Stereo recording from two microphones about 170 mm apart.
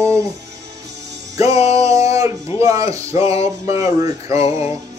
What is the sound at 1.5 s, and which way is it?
Music, 40° left (ahead or behind).